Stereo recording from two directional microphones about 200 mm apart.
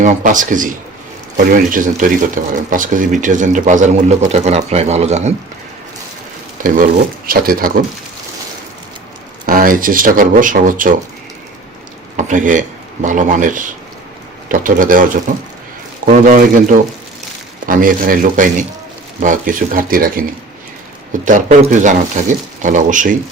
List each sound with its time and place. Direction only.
0.0 s speech: 40° right (ahead or behind)
6.6 s speech: 40° right (ahead or behind)
9.5 s speech: 45° right (ahead or behind)
12.1 s speech: 40° right (ahead or behind)